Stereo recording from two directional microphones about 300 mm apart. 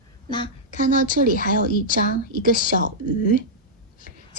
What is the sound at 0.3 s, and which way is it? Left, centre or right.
Speech, centre.